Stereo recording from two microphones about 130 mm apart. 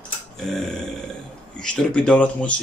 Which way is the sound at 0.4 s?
Centre (ahead or behind).